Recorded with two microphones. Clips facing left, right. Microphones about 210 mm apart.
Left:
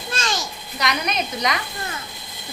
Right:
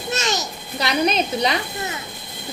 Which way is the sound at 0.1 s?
20° right (ahead or behind).